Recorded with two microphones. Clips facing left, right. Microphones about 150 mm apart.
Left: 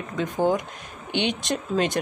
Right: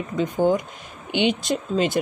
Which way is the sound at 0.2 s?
Centre (ahead or behind).